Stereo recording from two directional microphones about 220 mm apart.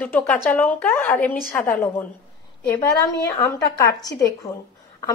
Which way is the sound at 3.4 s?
15° left (ahead or behind).